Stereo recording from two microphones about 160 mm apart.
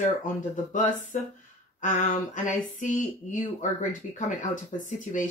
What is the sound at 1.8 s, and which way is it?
Speech, 50° left (ahead or behind).